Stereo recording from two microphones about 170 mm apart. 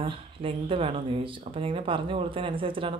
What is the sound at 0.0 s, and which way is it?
Speech, 30° right (ahead or behind).